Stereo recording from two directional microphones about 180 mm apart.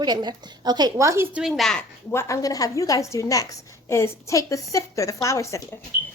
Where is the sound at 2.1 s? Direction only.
15° left (ahead or behind).